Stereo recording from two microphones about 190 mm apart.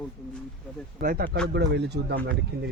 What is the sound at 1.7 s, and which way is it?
Speech, 60° right (ahead or behind).